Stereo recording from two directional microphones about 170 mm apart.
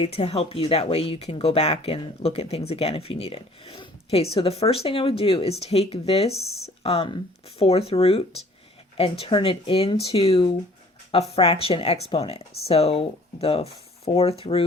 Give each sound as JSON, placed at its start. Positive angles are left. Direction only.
{"t": 0.0, "sound": "speech", "side_deg": 35}